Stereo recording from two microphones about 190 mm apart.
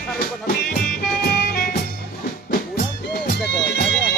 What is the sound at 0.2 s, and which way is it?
Music, 50° left (ahead or behind).